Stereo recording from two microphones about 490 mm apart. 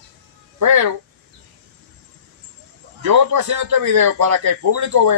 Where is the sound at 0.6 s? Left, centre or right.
Right.